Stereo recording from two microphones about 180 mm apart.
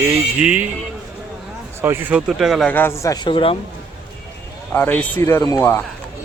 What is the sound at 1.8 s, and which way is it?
Speech, 10° right (ahead or behind).